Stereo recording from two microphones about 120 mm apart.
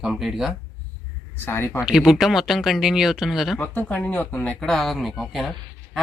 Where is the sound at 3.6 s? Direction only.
15° left (ahead or behind).